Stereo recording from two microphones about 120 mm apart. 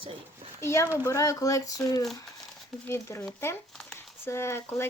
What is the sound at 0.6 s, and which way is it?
Speech, 25° left (ahead or behind).